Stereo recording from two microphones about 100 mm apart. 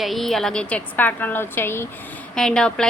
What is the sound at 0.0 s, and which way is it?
A woman's voice, centre (ahead or behind).